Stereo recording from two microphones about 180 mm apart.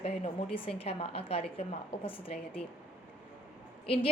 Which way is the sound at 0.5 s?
30° left (ahead or behind).